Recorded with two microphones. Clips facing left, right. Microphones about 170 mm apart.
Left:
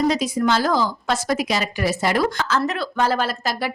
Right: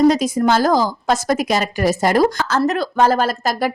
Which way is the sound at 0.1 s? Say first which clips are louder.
Right 4 dB; 45° right (ahead or behind).